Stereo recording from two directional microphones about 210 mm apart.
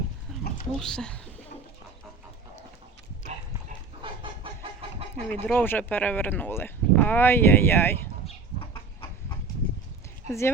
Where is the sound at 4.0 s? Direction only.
25° right (ahead or behind).